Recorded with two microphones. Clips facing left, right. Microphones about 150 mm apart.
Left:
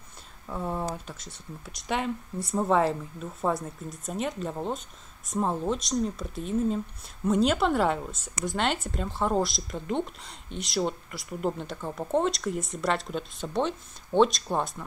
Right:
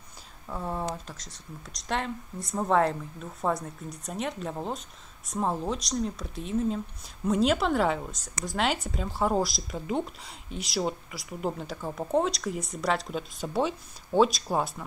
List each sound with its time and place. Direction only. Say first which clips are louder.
0.5 s speech: left 1 dB; centre (ahead or behind)
1.2 s speech: left 2 dB; 60° left (ahead or behind)
2.4 s speech: left 1 dB; 5° left (ahead or behind)